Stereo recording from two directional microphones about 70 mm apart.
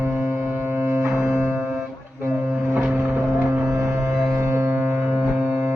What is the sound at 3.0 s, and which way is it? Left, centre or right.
Music, right.